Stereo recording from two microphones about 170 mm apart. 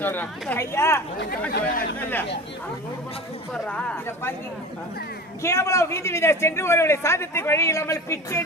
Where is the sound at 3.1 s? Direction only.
35° left (ahead or behind).